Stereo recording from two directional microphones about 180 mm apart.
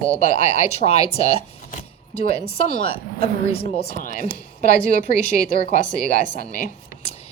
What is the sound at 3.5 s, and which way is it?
Speech, 60° left (ahead or behind).